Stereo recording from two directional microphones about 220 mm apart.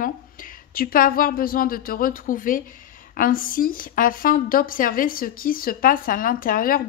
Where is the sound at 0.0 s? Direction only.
40° left (ahead or behind).